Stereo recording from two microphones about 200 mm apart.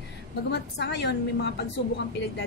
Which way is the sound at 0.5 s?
60° left (ahead or behind).